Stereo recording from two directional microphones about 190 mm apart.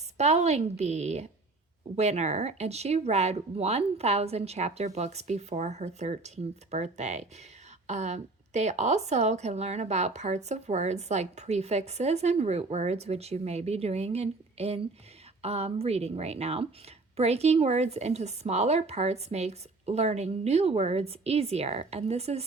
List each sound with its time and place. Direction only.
0.2 s a woman's voice: 35° right (ahead or behind)